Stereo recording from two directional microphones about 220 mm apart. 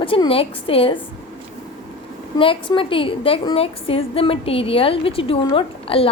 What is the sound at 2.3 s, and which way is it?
A woman's voice, 25° left (ahead or behind).